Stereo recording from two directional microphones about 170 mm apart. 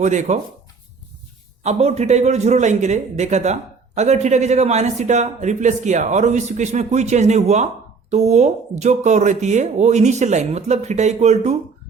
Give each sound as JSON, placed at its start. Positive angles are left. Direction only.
{"t": 0.0, "sound": "a man's voice", "side_deg": -45}
{"t": 1.6, "sound": "a man's voice", "side_deg": -40}